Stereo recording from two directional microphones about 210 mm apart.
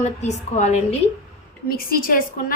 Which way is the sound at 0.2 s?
30° left (ahead or behind).